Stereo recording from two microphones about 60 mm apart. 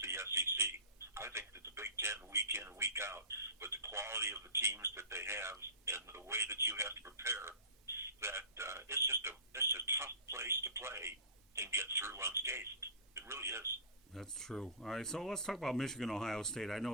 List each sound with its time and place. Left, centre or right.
0.0 s a sound: right
1.1 s speech: right
2.3 s a sound: right
2.7 s speech: right
6.1 s telephone: right
11.5 s speech: right
14.1 s speech: centre